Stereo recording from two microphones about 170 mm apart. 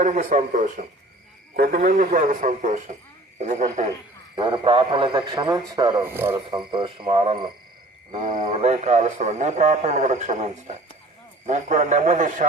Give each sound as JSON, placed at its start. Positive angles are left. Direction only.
{"t": 0.0, "sound": "a man's voice", "side_deg": -50}
{"t": 4.4, "sound": "a man's voice", "side_deg": -30}
{"t": 6.0, "sound": "speech", "side_deg": -15}
{"t": 6.7, "sound": "a man's voice", "side_deg": -30}
{"t": 8.1, "sound": "a man's voice", "side_deg": -45}
{"t": 8.4, "sound": "a man's voice", "side_deg": -35}